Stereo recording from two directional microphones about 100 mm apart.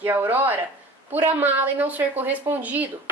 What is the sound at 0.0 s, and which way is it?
A woman's voice, 20° right (ahead or behind).